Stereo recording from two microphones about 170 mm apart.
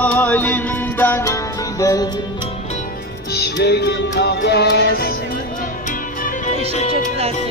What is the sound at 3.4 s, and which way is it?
Music, 75° left (ahead or behind).